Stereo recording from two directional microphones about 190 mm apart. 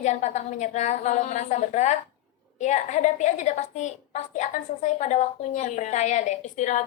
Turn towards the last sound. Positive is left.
turn(degrees=40)  # may be behind; listen again after turning